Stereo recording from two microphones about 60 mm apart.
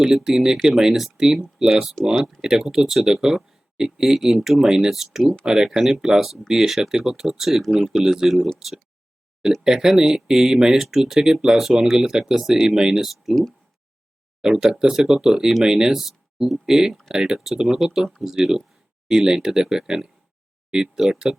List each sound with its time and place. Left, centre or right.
0.0 s speech: centre
14.4 s speech: centre